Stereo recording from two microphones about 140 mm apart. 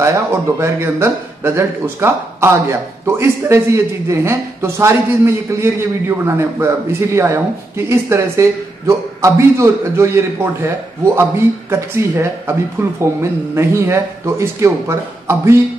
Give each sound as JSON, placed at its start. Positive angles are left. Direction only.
{"t": 0.0, "sound": "a man's voice", "side_deg": -20}